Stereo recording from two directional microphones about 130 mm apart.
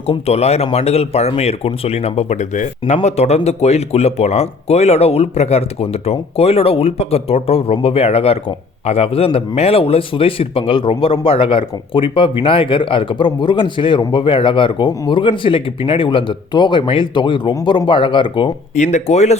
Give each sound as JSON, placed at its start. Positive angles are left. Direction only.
{"t": 0.1, "sound": "speech", "side_deg": 55}
{"t": 18.8, "sound": "speech", "side_deg": 60}